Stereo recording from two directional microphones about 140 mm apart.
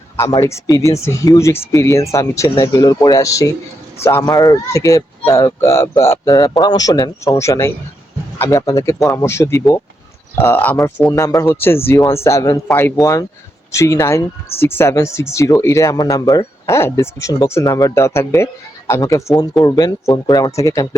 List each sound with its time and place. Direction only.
0.4 s speech: 20° left (ahead or behind)
13.0 s speech: centre (ahead or behind)
13.7 s speech: 20° left (ahead or behind)